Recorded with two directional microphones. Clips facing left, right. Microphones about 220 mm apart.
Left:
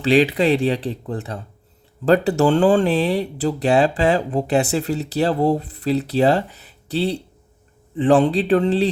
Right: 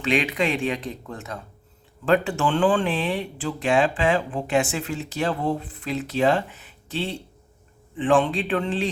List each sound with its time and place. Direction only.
0.0 s speech: 35° left (ahead or behind)